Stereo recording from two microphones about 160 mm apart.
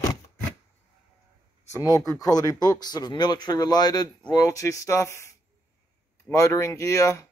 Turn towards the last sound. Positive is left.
turn(degrees=20)  # may be behind; listen again after turning